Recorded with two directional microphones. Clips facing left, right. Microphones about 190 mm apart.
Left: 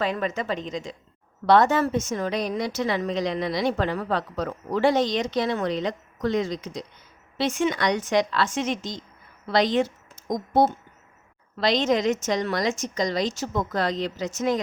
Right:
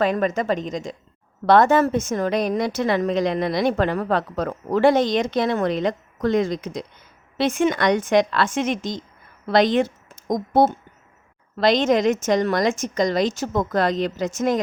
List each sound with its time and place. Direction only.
0.0 s a woman's voice: 50° right (ahead or behind)